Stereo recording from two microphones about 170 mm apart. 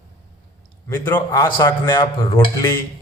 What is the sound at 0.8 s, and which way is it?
Speech, 15° left (ahead or behind).